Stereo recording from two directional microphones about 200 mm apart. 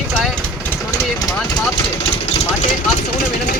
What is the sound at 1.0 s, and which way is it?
Engine, 20° left (ahead or behind).